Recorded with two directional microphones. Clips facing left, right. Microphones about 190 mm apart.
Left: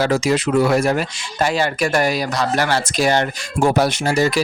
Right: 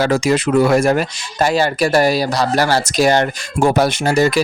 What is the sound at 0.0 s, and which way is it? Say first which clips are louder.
Speech: right 2 dB; 55° right (ahead or behind).